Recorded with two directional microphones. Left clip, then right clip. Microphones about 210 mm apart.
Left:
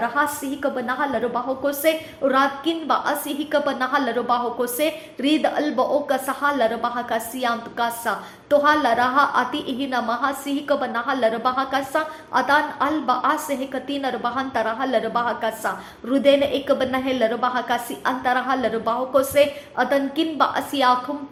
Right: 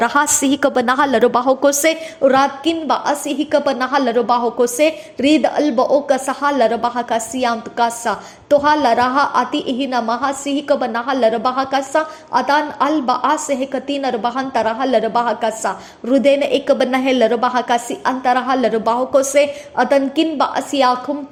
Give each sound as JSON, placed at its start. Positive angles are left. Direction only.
{"t": 0.0, "sound": "a woman's voice", "side_deg": -50}